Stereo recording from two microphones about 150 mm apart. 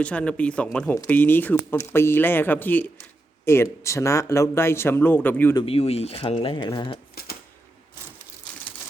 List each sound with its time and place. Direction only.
0.0 s a man's voice: 10° left (ahead or behind)
5.6 s speech: 40° left (ahead or behind)